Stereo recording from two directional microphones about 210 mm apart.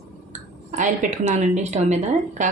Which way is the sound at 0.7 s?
35° right (ahead or behind).